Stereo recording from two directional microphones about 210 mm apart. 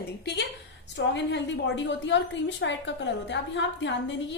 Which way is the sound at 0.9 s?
55° left (ahead or behind).